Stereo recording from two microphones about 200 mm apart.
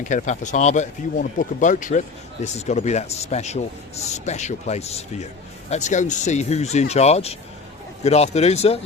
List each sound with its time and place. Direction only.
0.0 s a man's voice: 40° left (ahead or behind)